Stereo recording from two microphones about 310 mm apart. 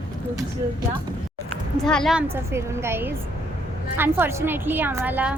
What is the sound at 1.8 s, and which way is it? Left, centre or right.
A woman's voice, centre.